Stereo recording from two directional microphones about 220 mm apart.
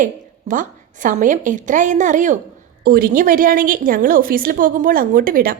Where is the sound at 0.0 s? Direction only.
35° right (ahead or behind).